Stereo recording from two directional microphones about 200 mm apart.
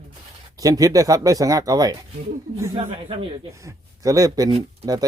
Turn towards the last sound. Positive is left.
turn(degrees=-20)  # may be behind; listen again after turning